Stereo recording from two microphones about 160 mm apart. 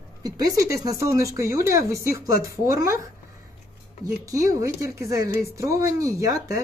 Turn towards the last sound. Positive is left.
turn(degrees=-20)  # may be behind; listen again after turning